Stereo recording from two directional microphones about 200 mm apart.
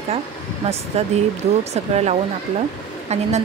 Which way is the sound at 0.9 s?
30° right (ahead or behind).